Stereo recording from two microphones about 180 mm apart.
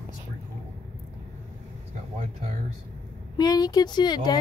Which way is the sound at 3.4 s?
20° left (ahead or behind).